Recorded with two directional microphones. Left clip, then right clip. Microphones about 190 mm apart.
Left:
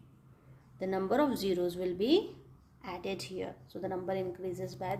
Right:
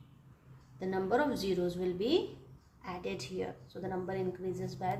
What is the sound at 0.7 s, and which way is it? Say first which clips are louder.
A woman's voice: left 1 dB; 45° left (ahead or behind).